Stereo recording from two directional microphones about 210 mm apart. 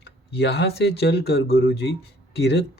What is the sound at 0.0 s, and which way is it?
Speech, 50° left (ahead or behind).